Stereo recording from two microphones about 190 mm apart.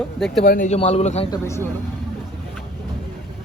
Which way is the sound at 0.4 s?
50° left (ahead or behind).